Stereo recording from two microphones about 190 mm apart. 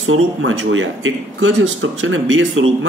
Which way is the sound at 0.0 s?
90° right.